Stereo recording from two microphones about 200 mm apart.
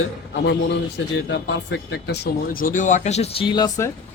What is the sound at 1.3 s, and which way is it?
Speech, 60° left (ahead or behind).